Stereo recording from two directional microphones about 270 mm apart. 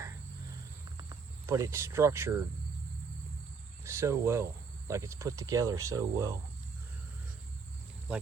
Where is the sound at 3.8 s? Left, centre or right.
Centre.